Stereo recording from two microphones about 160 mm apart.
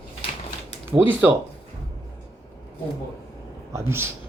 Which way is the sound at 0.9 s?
15° right (ahead or behind).